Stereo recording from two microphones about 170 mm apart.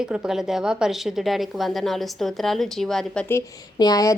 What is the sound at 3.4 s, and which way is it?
Speech, 20° left (ahead or behind).